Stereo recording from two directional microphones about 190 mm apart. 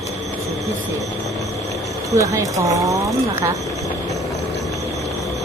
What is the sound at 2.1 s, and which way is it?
Speech, 15° right (ahead or behind).